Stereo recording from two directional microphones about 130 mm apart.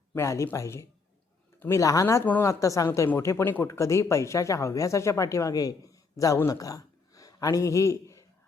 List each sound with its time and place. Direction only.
0.1 s speech: 20° left (ahead or behind)